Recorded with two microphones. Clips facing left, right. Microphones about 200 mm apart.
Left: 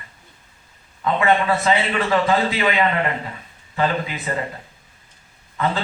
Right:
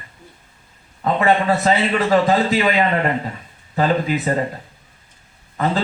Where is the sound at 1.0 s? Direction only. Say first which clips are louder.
Right 2 dB; 40° right (ahead or behind).